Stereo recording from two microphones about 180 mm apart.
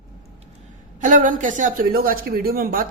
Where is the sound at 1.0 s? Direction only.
45° right (ahead or behind).